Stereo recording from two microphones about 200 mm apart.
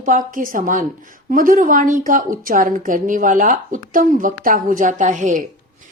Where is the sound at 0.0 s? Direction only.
40° right (ahead or behind).